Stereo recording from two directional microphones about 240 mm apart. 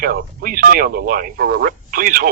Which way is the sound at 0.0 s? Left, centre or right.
Right.